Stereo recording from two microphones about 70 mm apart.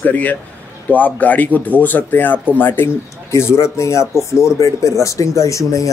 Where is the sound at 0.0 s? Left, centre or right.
Left.